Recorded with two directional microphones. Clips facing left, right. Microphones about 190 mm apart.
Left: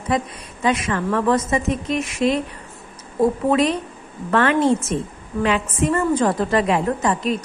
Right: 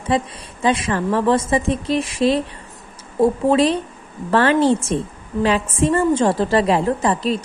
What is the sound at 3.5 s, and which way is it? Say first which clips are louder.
A woman's voice: right 2 dB; 30° right (ahead or behind).